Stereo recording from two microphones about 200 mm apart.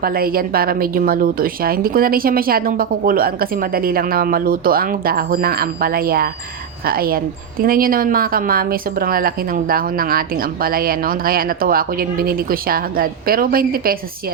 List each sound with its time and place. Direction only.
0.0 s speech: 45° right (ahead or behind)